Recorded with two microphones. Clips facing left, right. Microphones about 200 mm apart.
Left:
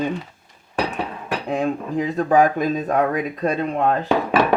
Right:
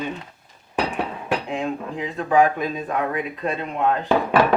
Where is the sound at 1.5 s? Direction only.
40° left (ahead or behind).